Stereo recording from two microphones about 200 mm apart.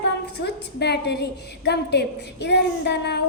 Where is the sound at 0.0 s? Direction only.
55° left (ahead or behind).